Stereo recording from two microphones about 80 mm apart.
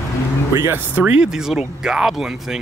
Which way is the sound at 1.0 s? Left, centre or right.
Centre.